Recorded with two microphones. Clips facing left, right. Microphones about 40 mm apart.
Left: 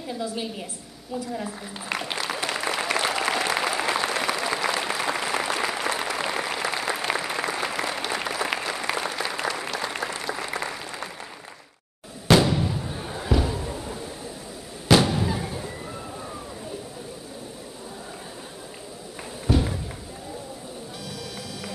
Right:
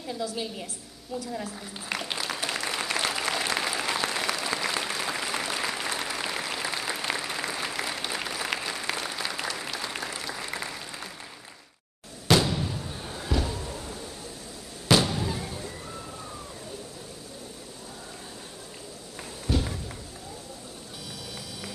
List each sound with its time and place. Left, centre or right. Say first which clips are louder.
0.2 s a woman's voice: left 2 dB; left
2.2 s applause: left 4 dB; centre
12.3 s a sound: left 4 dB; centre
14.9 s fireworks: left 4 dB; centre
19.4 s thump: left 5 dB; centre